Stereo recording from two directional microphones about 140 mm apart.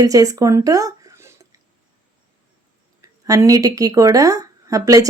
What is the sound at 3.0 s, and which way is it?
Speech, 25° right (ahead or behind).